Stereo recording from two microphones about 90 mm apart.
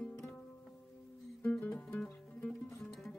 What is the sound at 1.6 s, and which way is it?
Music, 15° left (ahead or behind).